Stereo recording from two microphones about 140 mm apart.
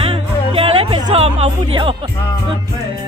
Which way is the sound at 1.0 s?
45° right (ahead or behind).